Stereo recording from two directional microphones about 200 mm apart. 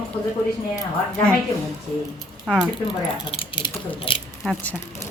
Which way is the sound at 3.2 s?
25° left (ahead or behind).